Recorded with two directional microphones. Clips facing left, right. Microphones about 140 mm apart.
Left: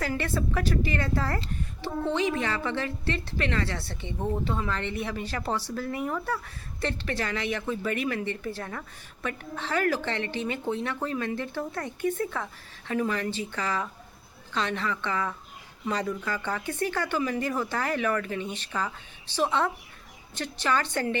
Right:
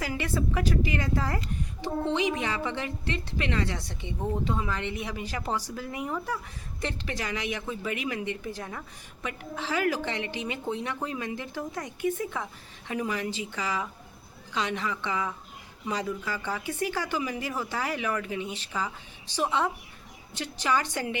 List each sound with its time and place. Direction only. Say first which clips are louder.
0.0 s speech: left 1 dB; 10° right (ahead or behind)